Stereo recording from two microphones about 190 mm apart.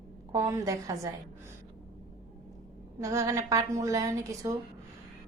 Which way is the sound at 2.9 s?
15° right (ahead or behind).